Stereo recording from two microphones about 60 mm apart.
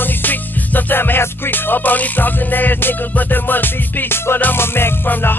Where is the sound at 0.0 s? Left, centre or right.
Left.